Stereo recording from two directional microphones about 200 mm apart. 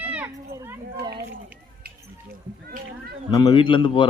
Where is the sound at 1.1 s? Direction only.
55° right (ahead or behind).